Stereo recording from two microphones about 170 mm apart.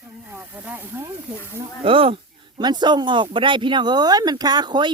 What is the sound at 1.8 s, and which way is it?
Speech, 30° right (ahead or behind).